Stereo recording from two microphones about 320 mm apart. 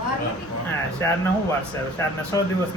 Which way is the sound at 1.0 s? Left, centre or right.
Centre.